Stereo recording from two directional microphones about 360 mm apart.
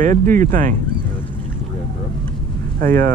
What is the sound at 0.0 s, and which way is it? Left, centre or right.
Speech, right.